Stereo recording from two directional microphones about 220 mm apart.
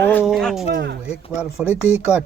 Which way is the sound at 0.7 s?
50° right (ahead or behind).